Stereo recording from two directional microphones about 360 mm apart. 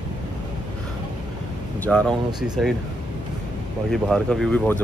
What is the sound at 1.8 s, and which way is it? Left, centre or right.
Speech, centre.